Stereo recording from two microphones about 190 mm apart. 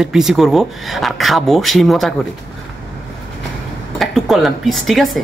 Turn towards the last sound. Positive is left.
turn(degrees=0)  # may be behind; listen again after turning